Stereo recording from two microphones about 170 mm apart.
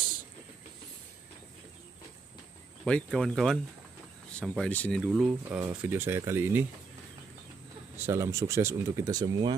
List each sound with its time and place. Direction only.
2.8 s speech: centre (ahead or behind)
5.0 s speech: 5° right (ahead or behind)
8.0 s speech: 15° right (ahead or behind)